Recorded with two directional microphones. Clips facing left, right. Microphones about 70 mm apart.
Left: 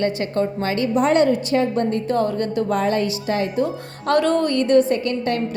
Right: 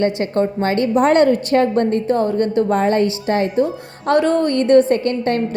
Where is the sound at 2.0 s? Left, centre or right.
Right.